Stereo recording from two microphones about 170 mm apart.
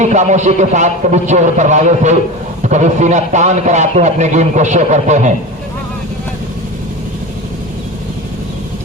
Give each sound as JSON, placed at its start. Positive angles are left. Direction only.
{"t": 0.0, "sound": "a man's voice", "side_deg": -45}